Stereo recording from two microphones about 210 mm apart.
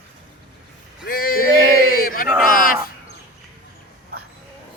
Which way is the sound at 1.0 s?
45° left (ahead or behind).